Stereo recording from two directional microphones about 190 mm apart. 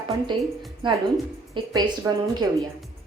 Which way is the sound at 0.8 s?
25° right (ahead or behind).